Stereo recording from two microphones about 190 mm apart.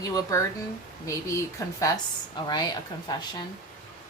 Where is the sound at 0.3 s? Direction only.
15° left (ahead or behind).